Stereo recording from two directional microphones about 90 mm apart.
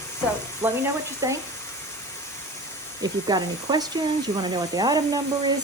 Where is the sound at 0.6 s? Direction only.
25° right (ahead or behind).